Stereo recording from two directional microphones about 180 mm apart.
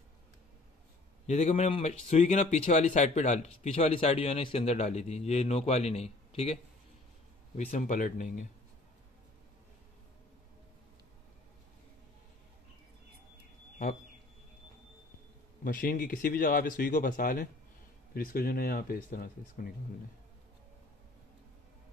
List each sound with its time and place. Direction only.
1.2 s speech: 35° left (ahead or behind)
15.6 s speech: 50° left (ahead or behind)